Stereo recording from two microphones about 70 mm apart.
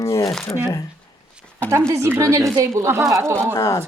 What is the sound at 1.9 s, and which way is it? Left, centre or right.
A woman's voice, right.